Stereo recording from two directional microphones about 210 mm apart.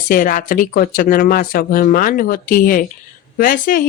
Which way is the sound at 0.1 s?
40° left (ahead or behind).